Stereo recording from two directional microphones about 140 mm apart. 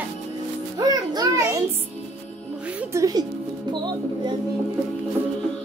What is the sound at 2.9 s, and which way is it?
Music, 25° right (ahead or behind).